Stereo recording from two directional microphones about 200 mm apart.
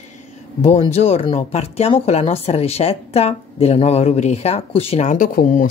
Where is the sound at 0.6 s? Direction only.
35° left (ahead or behind).